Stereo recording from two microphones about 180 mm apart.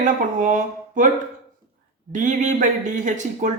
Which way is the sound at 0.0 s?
45° right (ahead or behind).